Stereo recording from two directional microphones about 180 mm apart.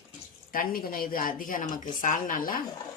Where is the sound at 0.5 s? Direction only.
55° left (ahead or behind).